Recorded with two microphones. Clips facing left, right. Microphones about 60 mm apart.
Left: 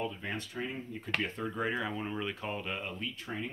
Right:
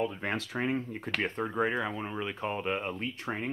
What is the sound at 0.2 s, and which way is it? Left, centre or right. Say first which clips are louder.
Speech: right 5 dB; right.